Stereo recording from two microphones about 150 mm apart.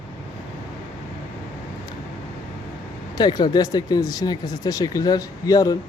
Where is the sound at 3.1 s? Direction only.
25° left (ahead or behind).